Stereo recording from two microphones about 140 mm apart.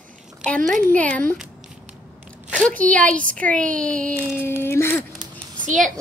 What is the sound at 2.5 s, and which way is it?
A woman's voice, 10° left (ahead or behind).